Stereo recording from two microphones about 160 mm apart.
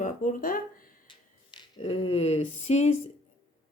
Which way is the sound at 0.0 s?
55° left (ahead or behind).